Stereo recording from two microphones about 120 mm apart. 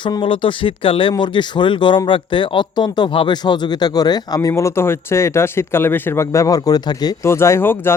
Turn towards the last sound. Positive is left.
turn(degrees=20)  # may be behind; listen again after turning